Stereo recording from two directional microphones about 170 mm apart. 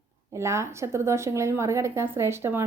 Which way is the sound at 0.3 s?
15° right (ahead or behind).